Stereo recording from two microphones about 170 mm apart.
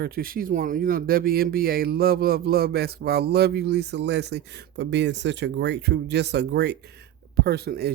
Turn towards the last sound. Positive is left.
turn(degrees=-70)  # may be behind; listen again after turning